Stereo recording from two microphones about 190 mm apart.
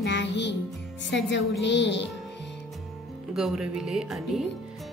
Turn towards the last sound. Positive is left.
turn(degrees=0)  # may be behind; listen again after turning